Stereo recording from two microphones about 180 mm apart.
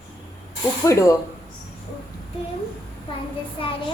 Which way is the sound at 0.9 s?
15° left (ahead or behind).